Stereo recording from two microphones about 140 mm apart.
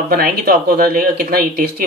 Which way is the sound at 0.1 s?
90° right.